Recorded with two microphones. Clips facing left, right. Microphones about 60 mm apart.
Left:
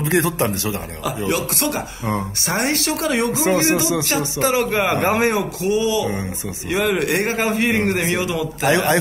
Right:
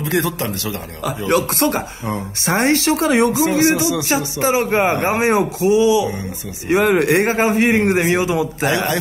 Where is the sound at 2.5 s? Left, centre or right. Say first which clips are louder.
Right 6 dB; right.